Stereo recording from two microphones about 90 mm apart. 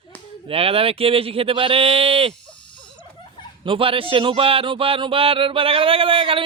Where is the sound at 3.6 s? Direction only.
75° right (ahead or behind).